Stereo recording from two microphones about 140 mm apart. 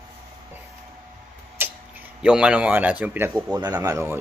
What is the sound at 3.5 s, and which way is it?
Speech, 25° right (ahead or behind).